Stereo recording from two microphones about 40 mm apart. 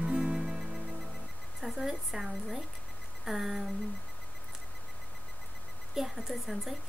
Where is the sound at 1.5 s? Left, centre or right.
Centre.